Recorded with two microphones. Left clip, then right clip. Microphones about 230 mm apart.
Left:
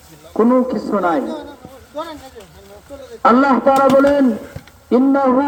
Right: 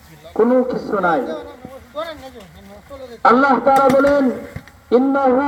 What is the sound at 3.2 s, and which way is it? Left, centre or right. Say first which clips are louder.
A man's voice: even; left.